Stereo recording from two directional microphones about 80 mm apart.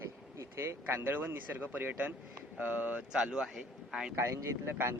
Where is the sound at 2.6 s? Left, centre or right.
Right.